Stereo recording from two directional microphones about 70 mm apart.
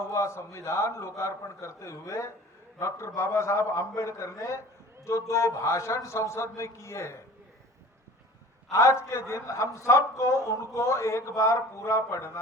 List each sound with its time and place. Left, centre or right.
0.0 s a man's voice: left
8.7 s a man's voice: left